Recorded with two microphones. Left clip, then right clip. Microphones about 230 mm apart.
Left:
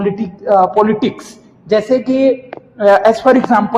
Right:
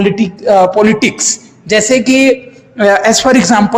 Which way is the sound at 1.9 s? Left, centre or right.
Right.